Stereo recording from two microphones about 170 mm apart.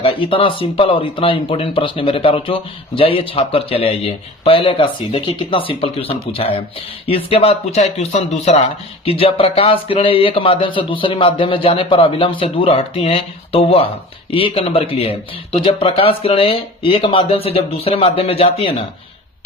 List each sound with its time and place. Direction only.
0.0 s speech: 30° left (ahead or behind)